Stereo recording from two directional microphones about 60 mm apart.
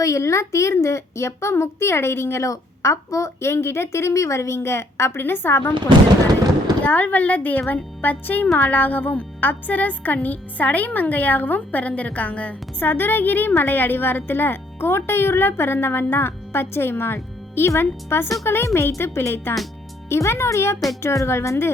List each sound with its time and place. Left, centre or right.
0.0 s speech: left
6.8 s a woman's voice: left